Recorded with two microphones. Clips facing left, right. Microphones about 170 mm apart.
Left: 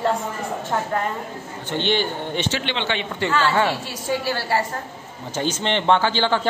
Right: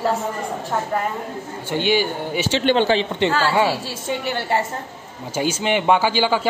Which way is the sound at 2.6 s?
45° right (ahead or behind).